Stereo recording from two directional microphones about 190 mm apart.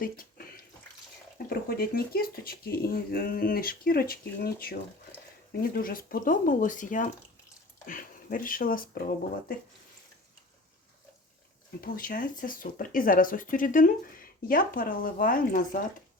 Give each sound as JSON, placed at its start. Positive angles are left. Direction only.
{"t": 0.0, "sound": "speech", "side_deg": 50}
{"t": 1.5, "sound": "speech", "side_deg": 50}
{"t": 11.8, "sound": "speech", "side_deg": 50}